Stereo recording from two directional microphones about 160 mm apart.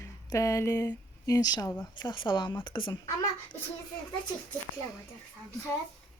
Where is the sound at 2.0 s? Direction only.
30° left (ahead or behind).